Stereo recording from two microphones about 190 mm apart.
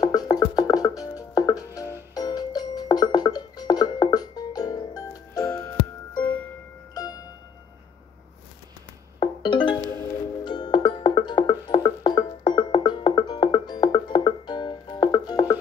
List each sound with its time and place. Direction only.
0.0 s music: 20° left (ahead or behind)
6.9 s music: 20° left (ahead or behind)
9.2 s music: 25° left (ahead or behind)